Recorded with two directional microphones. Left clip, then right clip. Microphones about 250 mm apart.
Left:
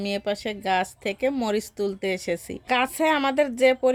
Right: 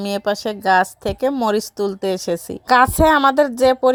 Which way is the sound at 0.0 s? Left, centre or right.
Right.